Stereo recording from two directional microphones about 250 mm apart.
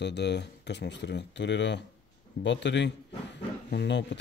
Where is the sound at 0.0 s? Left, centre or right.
Left.